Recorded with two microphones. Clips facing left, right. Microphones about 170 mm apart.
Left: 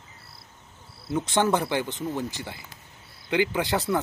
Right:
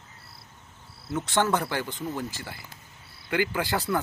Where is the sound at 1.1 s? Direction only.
15° left (ahead or behind).